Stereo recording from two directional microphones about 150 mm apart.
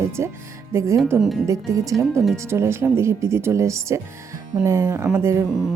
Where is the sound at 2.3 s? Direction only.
20° right (ahead or behind).